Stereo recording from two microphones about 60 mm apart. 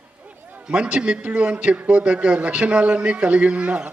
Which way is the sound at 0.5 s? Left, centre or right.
Centre.